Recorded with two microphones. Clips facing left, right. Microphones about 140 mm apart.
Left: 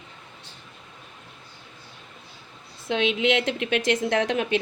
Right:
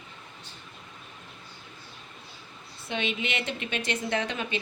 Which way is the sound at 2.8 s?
90° left.